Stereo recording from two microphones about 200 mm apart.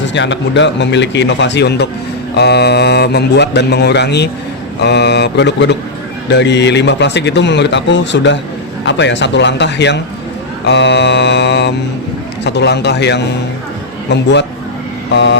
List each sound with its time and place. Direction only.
0.0 s a man's voice: 65° left (ahead or behind)